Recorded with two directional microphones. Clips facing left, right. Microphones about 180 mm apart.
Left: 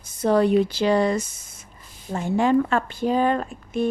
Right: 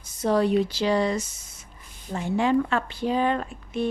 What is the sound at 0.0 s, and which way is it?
Speech, 55° left (ahead or behind).